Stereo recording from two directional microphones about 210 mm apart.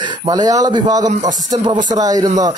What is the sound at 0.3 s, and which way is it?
A man's voice, 20° right (ahead or behind).